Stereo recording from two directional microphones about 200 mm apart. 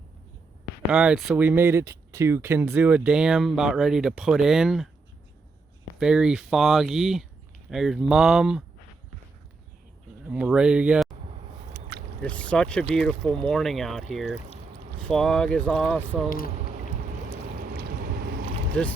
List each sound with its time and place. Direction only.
0.9 s speech: 5° right (ahead or behind)
6.0 s speech: 5° right (ahead or behind)
10.2 s speech: 5° right (ahead or behind)
11.7 s a sound: 55° right (ahead or behind)
12.2 s speech: 5° left (ahead or behind)
17.6 s boat: 50° right (ahead or behind)